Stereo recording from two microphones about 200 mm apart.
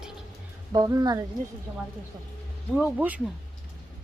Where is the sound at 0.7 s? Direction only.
20° right (ahead or behind).